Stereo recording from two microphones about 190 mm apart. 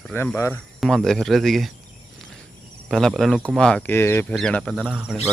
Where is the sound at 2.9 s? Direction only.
Centre (ahead or behind).